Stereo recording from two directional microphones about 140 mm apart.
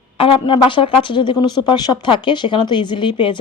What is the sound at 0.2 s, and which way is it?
Speech, 40° left (ahead or behind).